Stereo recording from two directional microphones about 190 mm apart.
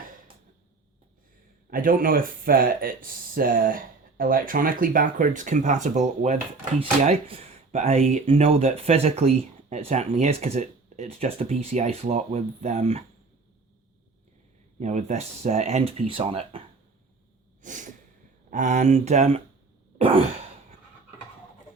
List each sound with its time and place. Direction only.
1.7 s speech: 50° right (ahead or behind)
14.8 s speech: 40° right (ahead or behind)
17.6 s a sound: 40° right (ahead or behind)
18.5 s speech: 40° right (ahead or behind)